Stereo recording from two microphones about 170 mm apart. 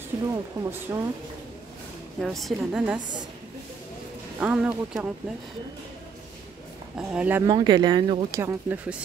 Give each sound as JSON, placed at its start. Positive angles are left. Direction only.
{"t": 0.3, "sound": "speech", "side_deg": -15}
{"t": 2.1, "sound": "a woman's voice", "side_deg": 0}
{"t": 4.4, "sound": "a woman's voice", "side_deg": -5}
{"t": 7.0, "sound": "speech", "side_deg": -5}
{"t": 7.4, "sound": "speech", "side_deg": -25}